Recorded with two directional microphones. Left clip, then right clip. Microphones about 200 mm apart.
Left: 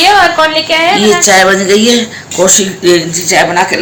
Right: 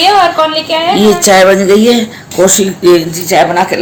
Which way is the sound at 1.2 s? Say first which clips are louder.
Right 1 dB; 55° right (ahead or behind).